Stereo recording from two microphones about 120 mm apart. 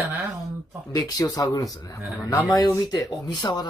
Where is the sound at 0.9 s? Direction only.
30° left (ahead or behind).